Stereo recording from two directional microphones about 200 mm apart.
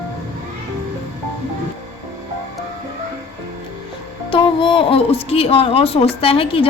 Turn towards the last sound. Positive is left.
turn(degrees=25)  # may be behind; listen again after turning